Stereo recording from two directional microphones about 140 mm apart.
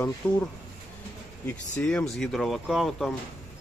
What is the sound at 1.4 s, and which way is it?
Speech, 10° left (ahead or behind).